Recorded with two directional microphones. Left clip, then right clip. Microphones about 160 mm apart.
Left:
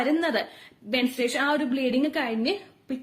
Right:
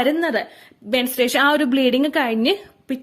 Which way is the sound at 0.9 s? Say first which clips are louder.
Right 7 dB; 55° right (ahead or behind).